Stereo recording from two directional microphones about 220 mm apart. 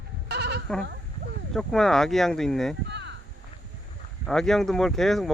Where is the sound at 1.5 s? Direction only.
Centre (ahead or behind).